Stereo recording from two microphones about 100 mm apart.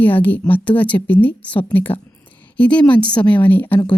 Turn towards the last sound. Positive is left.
turn(degrees=20)  # may be behind; listen again after turning